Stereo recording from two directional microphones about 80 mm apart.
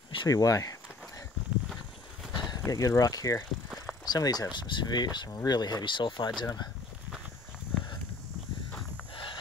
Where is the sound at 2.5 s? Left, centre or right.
Left.